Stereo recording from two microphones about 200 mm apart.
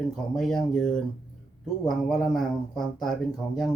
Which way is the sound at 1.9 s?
Centre (ahead or behind).